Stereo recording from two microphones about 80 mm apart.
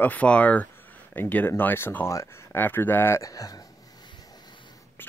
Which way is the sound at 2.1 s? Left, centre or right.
Left.